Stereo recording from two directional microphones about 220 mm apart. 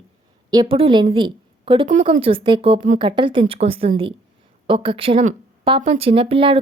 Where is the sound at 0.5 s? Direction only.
20° right (ahead or behind).